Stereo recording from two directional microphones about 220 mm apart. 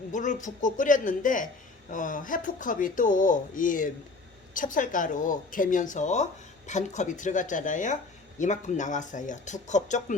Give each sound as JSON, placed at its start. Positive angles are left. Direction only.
{"t": 0.1, "sound": "speech", "side_deg": 35}